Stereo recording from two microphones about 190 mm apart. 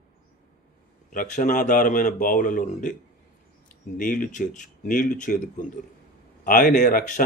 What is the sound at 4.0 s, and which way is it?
Speech, 45° left (ahead or behind).